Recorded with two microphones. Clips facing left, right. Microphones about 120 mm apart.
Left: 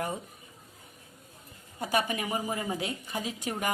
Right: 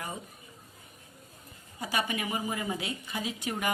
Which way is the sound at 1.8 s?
45° left (ahead or behind).